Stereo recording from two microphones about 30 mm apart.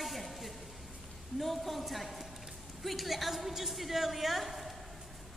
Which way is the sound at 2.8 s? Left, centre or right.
Centre.